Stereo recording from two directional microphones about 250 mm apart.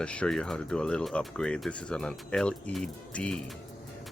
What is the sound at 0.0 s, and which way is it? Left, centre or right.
Speech, centre.